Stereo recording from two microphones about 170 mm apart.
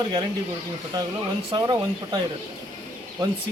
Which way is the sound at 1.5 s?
25° right (ahead or behind).